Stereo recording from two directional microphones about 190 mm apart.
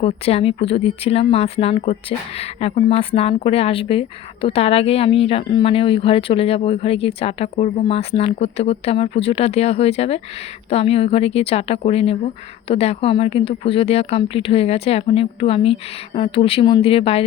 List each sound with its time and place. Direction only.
0.0 s a woman's voice: 30° left (ahead or behind)